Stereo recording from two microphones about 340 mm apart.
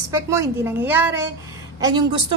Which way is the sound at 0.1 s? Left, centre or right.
Centre.